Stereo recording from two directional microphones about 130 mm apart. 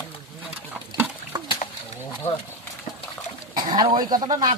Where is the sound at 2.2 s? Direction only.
55° left (ahead or behind).